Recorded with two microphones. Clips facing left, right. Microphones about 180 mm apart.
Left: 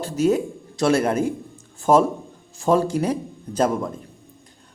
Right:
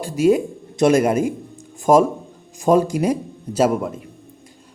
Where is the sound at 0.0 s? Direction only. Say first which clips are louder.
Right 3 dB; 10° right (ahead or behind).